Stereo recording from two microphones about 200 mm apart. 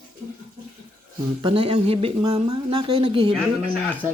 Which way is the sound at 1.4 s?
25° right (ahead or behind).